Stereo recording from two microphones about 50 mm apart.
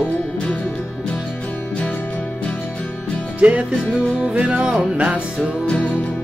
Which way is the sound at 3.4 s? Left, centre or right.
Right.